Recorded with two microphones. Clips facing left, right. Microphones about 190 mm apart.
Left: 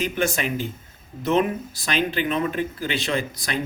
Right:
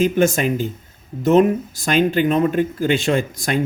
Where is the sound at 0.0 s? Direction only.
45° right (ahead or behind).